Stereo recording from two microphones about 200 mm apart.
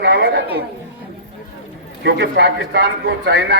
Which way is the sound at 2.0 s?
60° right (ahead or behind).